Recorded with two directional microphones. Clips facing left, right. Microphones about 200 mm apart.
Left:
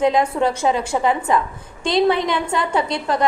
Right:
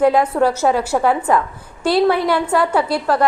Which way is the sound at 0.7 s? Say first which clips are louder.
Right 3 dB; 65° right (ahead or behind).